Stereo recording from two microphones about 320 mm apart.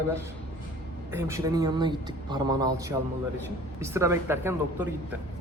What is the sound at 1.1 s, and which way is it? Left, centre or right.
A man's voice, centre.